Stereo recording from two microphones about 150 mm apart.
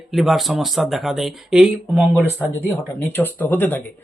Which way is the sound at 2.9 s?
15° left (ahead or behind).